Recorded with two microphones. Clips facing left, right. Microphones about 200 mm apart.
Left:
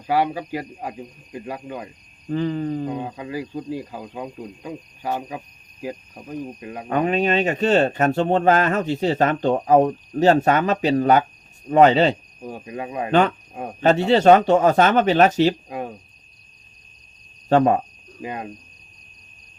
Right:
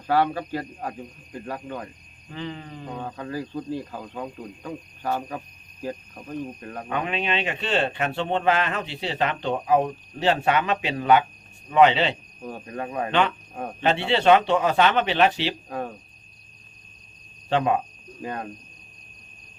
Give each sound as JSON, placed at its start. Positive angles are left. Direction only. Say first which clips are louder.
{"t": 0.0, "sound": "speech", "louder": "left 1 dB", "side_deg": 10}
{"t": 2.3, "sound": "a sound", "louder": "left 12 dB", "side_deg": 40}
{"t": 2.8, "sound": "speech", "louder": "left 5 dB", "side_deg": 15}
{"t": 6.8, "sound": "speech", "louder": "left 8 dB", "side_deg": 40}
{"t": 12.4, "sound": "speech", "louder": "left 2 dB", "side_deg": 10}
{"t": 13.1, "sound": "speech", "louder": "left 6 dB", "side_deg": 45}
{"t": 13.5, "sound": "speech", "louder": "left 1 dB", "side_deg": 10}
{"t": 13.8, "sound": "speech", "louder": "left 6 dB", "side_deg": 40}
{"t": 15.7, "sound": "speech", "louder": "left 1 dB", "side_deg": 15}
{"t": 17.5, "sound": "speech", "louder": "left 6 dB", "side_deg": 45}
{"t": 18.2, "sound": "speech", "louder": "left 1 dB", "side_deg": 10}